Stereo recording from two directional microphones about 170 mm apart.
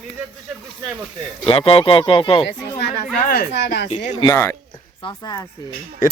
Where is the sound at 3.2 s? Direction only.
70° left (ahead or behind).